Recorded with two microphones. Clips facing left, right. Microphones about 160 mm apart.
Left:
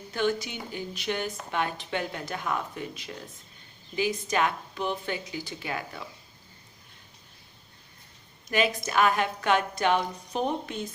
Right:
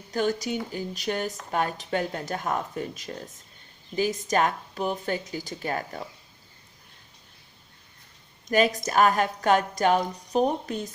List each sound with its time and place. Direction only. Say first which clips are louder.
0.1 s speech: right 2 dB; 40° right (ahead or behind)
8.4 s speech: right 4 dB; 40° right (ahead or behind)